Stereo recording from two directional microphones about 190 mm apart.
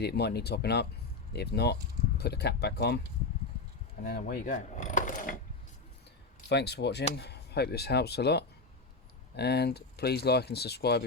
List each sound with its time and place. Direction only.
0.0 s speech: 60° left (ahead or behind)
4.0 s coin: 50° left (ahead or behind)
6.5 s speech: 60° left (ahead or behind)